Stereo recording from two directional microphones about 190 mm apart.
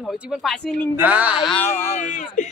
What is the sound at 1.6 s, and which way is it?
Speech, 15° left (ahead or behind).